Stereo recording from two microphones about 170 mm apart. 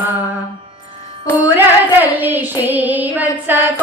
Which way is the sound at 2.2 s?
10° right (ahead or behind).